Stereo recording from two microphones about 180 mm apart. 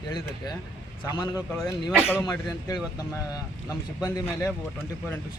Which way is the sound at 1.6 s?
10° left (ahead or behind).